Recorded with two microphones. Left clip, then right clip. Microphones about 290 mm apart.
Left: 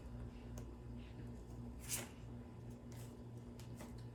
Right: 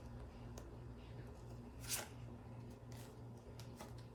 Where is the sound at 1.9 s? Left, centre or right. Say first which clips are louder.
Right 2 dB; centre.